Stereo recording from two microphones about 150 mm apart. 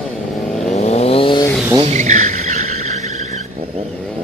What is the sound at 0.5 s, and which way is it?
Vehicle, 5° left (ahead or behind).